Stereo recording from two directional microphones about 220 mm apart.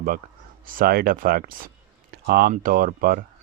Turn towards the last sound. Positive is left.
turn(degrees=-40)  # may be behind; listen again after turning